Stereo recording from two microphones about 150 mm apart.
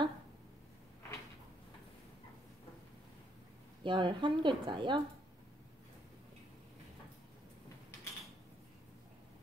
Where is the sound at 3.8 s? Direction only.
30° right (ahead or behind).